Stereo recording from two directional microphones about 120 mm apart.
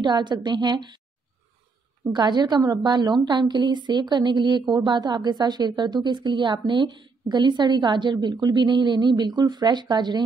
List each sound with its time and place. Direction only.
0.0 s a woman's voice: 40° right (ahead or behind)
2.1 s a woman's voice: 35° right (ahead or behind)